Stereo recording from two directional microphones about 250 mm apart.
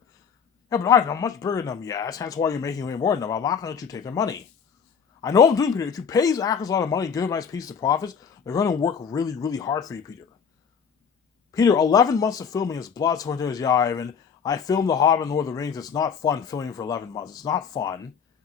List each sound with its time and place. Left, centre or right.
0.7 s speech: centre
11.5 s speech: centre